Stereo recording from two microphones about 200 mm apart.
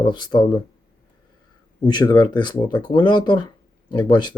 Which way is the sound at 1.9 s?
20° left (ahead or behind).